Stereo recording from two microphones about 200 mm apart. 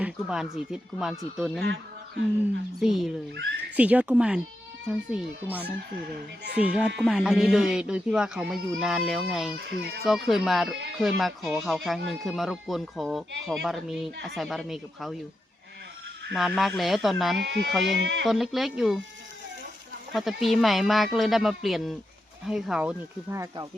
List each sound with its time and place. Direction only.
0.0 s speech: 5° right (ahead or behind)
1.6 s a sound: 60° right (ahead or behind)
2.8 s speech: centre (ahead or behind)
16.3 s speech: centre (ahead or behind)
17.4 s speech: 65° right (ahead or behind)
17.7 s speech: centre (ahead or behind)
18.0 s speech: 65° right (ahead or behind)
18.3 s speech: centre (ahead or behind)
20.1 s speech: centre (ahead or behind)